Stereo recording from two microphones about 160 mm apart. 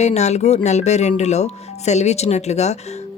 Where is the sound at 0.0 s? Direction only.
45° left (ahead or behind).